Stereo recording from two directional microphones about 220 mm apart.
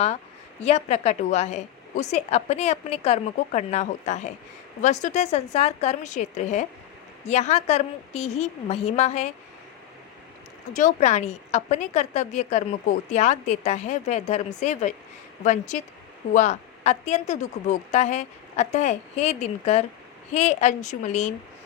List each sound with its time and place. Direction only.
0.6 s a woman's voice: 30° left (ahead or behind)
10.8 s a woman's voice: 35° left (ahead or behind)